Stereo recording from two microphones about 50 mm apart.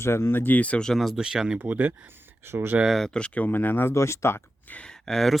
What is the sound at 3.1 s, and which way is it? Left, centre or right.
Speech, left.